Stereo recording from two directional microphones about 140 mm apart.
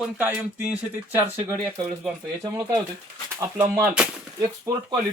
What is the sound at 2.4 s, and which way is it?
Speech, 25° right (ahead or behind).